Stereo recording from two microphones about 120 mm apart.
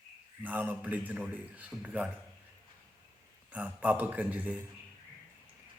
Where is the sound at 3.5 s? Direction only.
15° right (ahead or behind).